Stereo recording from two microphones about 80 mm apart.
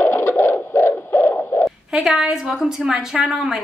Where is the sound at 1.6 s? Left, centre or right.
Centre.